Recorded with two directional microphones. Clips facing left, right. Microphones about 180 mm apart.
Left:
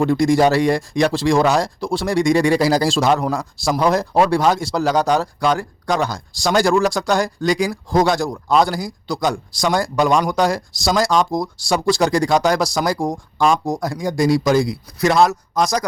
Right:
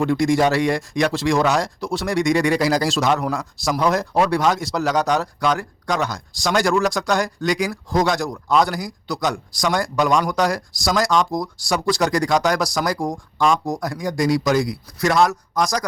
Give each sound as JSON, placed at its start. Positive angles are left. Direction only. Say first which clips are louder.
{"t": 0.0, "sound": "speech", "louder": "left 3 dB", "side_deg": 35}